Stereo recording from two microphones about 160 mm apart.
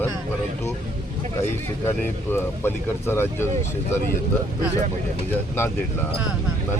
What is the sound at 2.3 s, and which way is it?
Speech, 15° left (ahead or behind).